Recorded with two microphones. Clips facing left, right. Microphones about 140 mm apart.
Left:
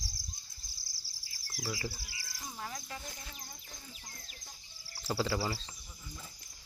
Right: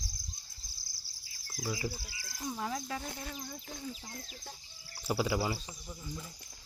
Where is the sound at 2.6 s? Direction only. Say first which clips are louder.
Right 5 dB; 75° right (ahead or behind).